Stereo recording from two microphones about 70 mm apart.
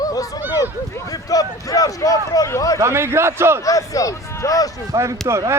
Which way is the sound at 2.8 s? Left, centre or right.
Right.